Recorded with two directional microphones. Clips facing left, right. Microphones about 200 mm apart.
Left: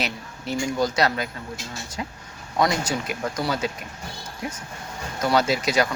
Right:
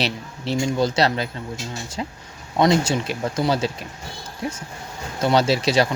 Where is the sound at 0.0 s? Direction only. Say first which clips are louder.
Right 4 dB; 30° right (ahead or behind).